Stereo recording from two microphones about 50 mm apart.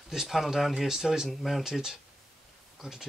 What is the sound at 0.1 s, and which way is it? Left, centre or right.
Speech, centre.